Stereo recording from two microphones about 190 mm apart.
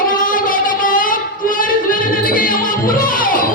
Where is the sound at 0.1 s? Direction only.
45° left (ahead or behind).